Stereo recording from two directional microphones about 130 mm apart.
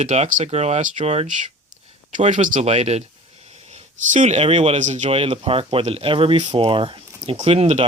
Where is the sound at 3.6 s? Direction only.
70° right (ahead or behind); by 4.8 s 50° right (ahead or behind).